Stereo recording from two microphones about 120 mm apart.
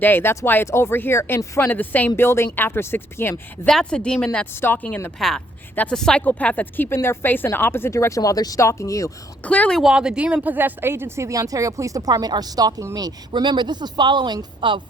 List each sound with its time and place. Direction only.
0.0 s speech: 20° left (ahead or behind)
3.7 s speech: 5° left (ahead or behind); by 9.1 s 25° left (ahead or behind)
9.4 s speech: 10° left (ahead or behind)
9.9 s speech: 5° right (ahead or behind); by 14.8 s 40° right (ahead or behind)